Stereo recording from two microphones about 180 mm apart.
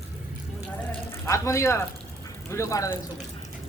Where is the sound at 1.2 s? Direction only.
15° left (ahead or behind).